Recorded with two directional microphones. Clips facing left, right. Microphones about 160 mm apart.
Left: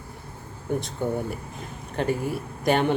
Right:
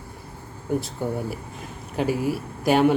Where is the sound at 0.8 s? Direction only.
5° right (ahead or behind).